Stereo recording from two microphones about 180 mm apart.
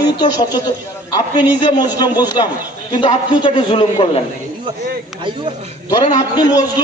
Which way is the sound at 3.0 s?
30° left (ahead or behind).